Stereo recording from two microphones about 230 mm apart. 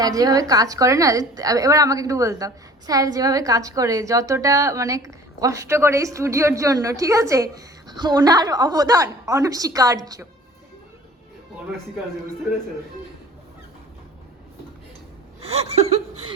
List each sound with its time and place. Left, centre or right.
0.0 s a woman's voice: centre
15.4 s chuckle: right